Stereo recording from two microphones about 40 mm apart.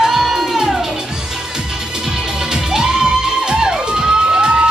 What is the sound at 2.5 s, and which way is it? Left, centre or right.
Music, centre.